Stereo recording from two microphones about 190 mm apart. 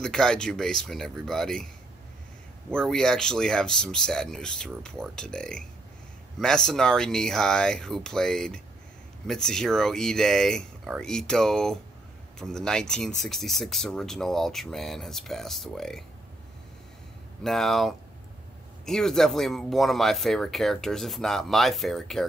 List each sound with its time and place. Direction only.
0.0 s speech: 5° left (ahead or behind)
2.7 s speech: centre (ahead or behind)
17.4 s speech: centre (ahead or behind)